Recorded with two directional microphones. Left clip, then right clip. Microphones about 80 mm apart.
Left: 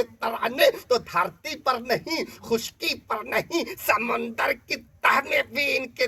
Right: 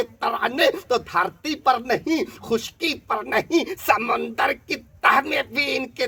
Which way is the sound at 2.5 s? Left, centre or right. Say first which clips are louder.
Right 2 dB; right.